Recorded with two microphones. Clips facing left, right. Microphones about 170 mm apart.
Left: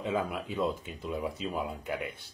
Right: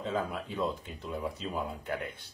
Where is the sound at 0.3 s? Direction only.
Centre (ahead or behind).